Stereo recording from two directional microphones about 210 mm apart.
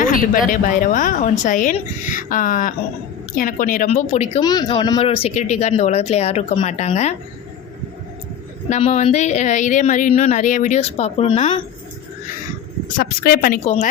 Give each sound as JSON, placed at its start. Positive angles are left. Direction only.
{"t": 0.5, "sound": "a woman's voice", "side_deg": 40}
{"t": 4.4, "sound": "a woman's voice", "side_deg": 20}
{"t": 8.7, "sound": "a woman's voice", "side_deg": 35}
{"t": 13.0, "sound": "speech", "side_deg": 45}
{"t": 13.7, "sound": "a woman's voice", "side_deg": 35}